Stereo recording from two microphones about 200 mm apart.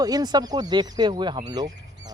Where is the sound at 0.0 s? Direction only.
20° right (ahead or behind).